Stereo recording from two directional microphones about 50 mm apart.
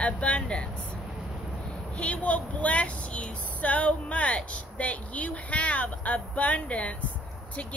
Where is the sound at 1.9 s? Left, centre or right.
Left.